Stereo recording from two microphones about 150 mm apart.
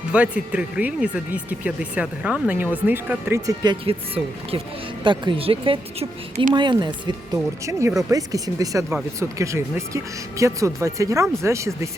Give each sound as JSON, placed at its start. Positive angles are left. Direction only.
{"t": 0.1, "sound": "speech", "side_deg": -10}
{"t": 7.6, "sound": "speech", "side_deg": -20}